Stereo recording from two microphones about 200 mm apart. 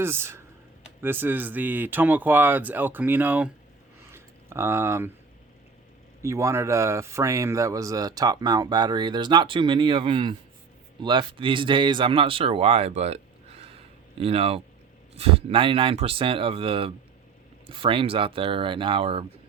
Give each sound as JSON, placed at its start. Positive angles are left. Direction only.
{"t": 0.0, "sound": "speech", "side_deg": -10}
{"t": 4.1, "sound": "a sound", "side_deg": -15}
{"t": 6.2, "sound": "speech", "side_deg": -15}